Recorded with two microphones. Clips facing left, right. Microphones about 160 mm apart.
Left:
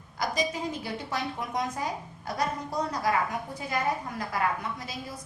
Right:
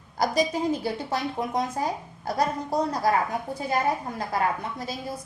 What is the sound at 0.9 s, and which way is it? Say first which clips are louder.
A woman's voice: right 5 dB; 30° right (ahead or behind).